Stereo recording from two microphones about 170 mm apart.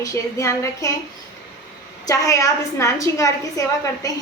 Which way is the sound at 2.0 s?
20° left (ahead or behind).